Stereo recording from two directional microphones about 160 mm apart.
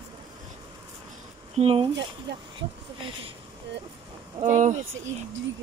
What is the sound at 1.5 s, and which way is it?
Speech, 35° right (ahead or behind).